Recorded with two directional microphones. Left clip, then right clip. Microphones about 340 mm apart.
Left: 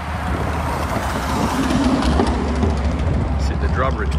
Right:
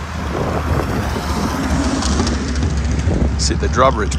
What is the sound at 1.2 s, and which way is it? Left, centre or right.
Vehicle, left.